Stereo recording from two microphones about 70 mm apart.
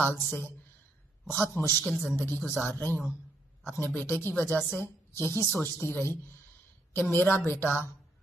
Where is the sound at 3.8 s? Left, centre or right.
Left.